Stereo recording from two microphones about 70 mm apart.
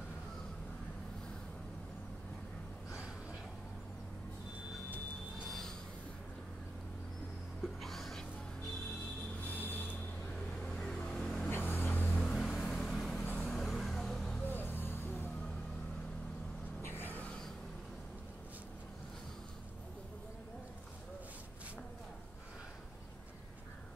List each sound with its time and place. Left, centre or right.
5.4 s vehicle: centre
7.6 s music: centre
9.4 s a sound: left
10.3 s vehicle: centre
11.5 s vehicle: left
12.2 s vehicle: centre
14.4 s music: left
16.8 s a sound: left